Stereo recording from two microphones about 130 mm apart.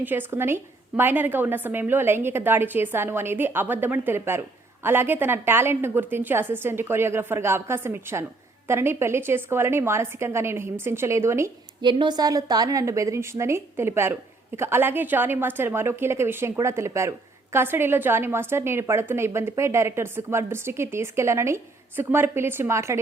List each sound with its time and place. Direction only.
0.0 s a woman's voice: 15° right (ahead or behind)
11.8 s a woman's voice: 35° right (ahead or behind); by 23.0 s 20° right (ahead or behind)